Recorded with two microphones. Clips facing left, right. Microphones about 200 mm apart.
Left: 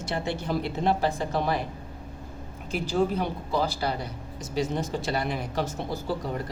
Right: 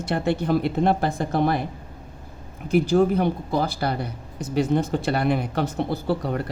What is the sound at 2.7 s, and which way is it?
Speech, 55° right (ahead or behind).